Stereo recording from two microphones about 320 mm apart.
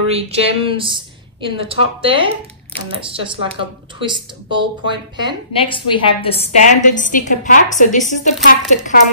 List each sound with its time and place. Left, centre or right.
0.1 s speech: centre
5.7 s a woman's voice: centre